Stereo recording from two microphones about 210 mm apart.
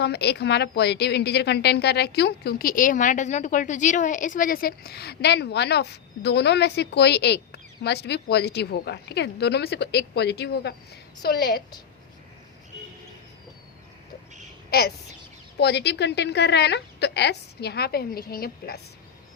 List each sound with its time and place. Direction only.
0.0 s a woman's voice: 50° left (ahead or behind)
14.7 s a woman's voice: 50° left (ahead or behind)